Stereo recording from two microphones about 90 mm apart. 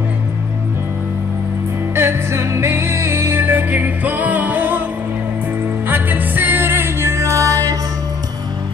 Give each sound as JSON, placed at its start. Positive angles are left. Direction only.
{"t": 2.0, "sound": "music", "side_deg": -30}
{"t": 5.9, "sound": "music", "side_deg": -20}